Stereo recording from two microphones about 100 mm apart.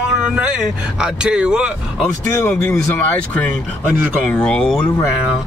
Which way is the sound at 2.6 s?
20° left (ahead or behind).